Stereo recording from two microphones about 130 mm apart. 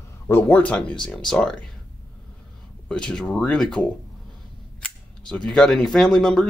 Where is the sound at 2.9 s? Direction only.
5° left (ahead or behind).